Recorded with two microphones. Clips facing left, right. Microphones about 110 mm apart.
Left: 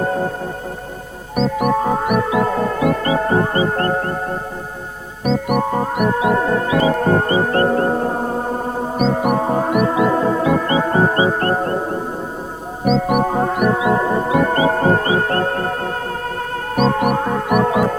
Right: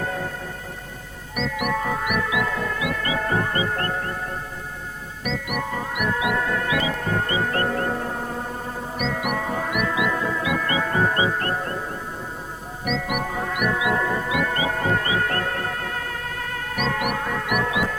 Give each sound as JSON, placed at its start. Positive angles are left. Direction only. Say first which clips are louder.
{"t": 0.0, "sound": "music", "louder": "left 9 dB", "side_deg": 35}
{"t": 1.4, "sound": "music", "louder": "left 8 dB", "side_deg": 35}